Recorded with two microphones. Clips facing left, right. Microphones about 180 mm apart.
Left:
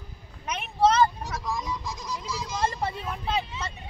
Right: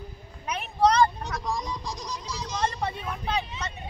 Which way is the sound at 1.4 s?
20° right (ahead or behind).